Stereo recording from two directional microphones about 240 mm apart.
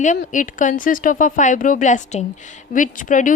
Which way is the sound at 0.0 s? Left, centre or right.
Left.